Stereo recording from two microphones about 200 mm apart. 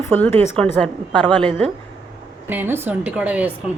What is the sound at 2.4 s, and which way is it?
A woman's voice, 10° right (ahead or behind).